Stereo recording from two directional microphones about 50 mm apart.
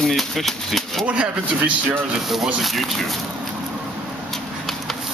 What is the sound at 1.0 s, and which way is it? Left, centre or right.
Speech, right.